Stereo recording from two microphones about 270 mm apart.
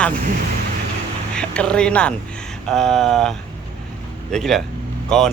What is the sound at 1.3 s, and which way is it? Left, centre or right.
Speech, centre.